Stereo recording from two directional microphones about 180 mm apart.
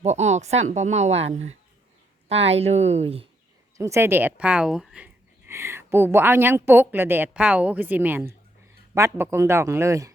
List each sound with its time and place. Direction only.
0.0 s a woman's voice: 40° right (ahead or behind)
3.8 s speech: 15° right (ahead or behind)